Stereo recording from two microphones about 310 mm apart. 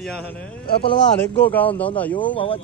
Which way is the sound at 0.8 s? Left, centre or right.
Centre.